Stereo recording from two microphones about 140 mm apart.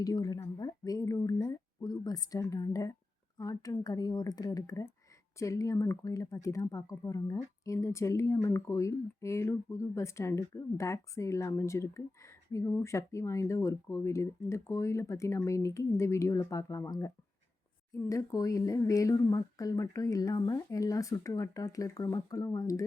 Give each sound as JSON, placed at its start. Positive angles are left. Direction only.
{"t": 0.0, "sound": "speech", "side_deg": 25}